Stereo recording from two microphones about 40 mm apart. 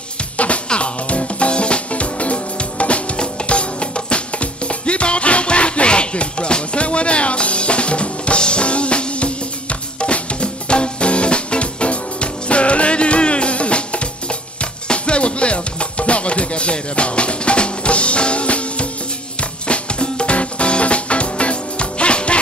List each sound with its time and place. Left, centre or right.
0.7 s music: left